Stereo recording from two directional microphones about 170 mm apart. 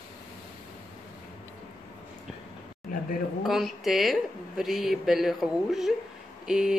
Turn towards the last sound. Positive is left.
turn(degrees=-5)  # may be behind; listen again after turning